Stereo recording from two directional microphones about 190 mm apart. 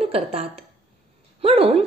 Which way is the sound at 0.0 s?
30° right (ahead or behind).